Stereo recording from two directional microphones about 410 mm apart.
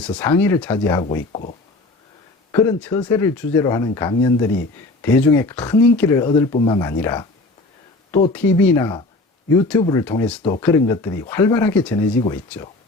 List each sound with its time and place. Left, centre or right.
0.0 s speech: centre
8.3 s speech: centre